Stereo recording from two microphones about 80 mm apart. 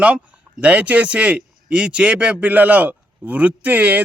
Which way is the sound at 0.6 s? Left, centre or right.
Centre.